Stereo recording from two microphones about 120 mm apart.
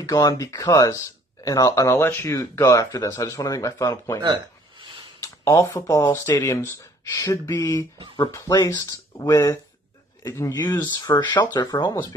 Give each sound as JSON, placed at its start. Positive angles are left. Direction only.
{"t": 0.0, "sound": "speech", "side_deg": 30}
{"t": 4.2, "sound": "a sound", "side_deg": -40}
{"t": 5.4, "sound": "speech", "side_deg": 25}